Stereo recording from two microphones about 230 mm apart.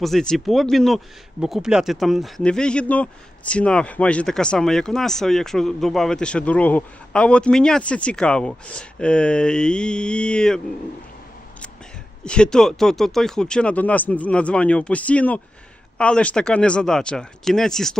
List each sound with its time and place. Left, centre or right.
0.0 s speech: centre
12.2 s speech: centre